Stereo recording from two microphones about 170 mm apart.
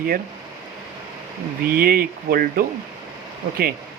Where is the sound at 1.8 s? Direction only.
60° right (ahead or behind).